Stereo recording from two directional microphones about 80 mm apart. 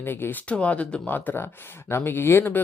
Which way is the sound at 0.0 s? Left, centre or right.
Left.